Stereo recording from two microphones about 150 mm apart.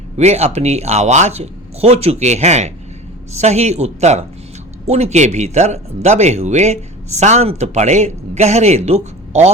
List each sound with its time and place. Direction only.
0.2 s speech: 45° right (ahead or behind)